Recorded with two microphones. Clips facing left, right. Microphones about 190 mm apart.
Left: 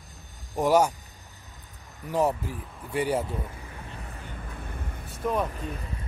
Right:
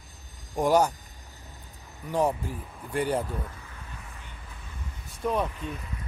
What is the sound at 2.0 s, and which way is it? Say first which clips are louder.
Speech: left 1 dB; 10° left (ahead or behind).